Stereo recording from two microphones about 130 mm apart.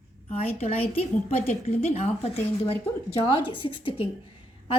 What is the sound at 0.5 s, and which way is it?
A woman's voice, 50° left (ahead or behind).